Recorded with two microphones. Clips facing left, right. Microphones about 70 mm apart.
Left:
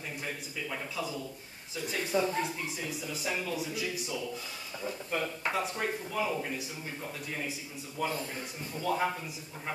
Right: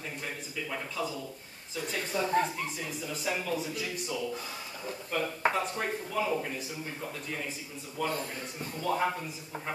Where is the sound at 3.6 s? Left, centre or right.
Centre.